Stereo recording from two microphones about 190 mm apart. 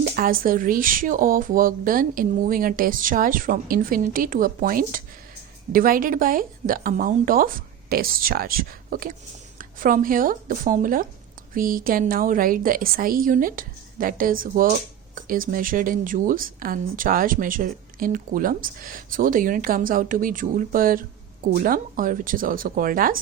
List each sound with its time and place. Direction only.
0.0 s a woman's voice: 50° right (ahead or behind)